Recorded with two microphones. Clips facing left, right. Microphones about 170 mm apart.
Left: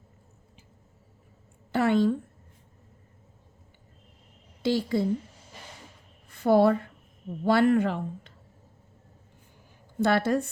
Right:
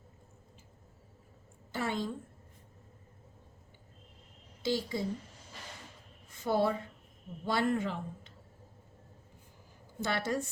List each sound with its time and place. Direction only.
1.7 s a woman's voice: 65° left (ahead or behind)
4.6 s speech: 60° left (ahead or behind)
6.2 s a sound: 60° left (ahead or behind)
7.4 s speech: 65° left (ahead or behind)
10.0 s speech: 60° left (ahead or behind)